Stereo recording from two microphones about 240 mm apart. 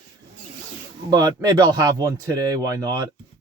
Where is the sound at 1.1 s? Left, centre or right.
Centre.